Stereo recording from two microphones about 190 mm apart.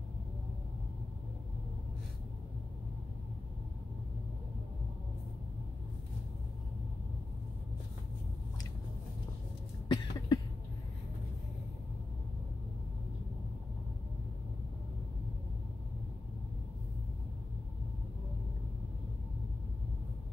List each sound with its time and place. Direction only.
9.8 s cough: 20° left (ahead or behind)